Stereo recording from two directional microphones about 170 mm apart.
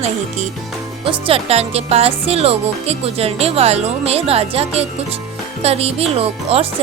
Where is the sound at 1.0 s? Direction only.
35° right (ahead or behind).